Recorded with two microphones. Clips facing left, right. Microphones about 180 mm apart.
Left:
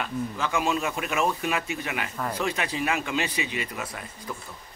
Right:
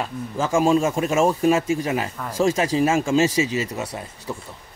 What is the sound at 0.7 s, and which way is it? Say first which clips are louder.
Speech: right 8 dB; 30° right (ahead or behind).